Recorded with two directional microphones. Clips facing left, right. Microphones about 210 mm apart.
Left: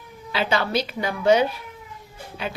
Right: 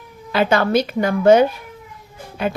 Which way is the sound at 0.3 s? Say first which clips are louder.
Right 7 dB; 50° right (ahead or behind).